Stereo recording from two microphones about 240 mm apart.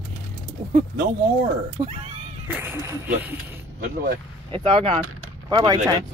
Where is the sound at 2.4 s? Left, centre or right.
Centre.